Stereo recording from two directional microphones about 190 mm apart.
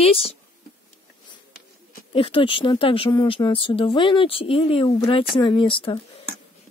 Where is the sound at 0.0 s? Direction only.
30° left (ahead or behind).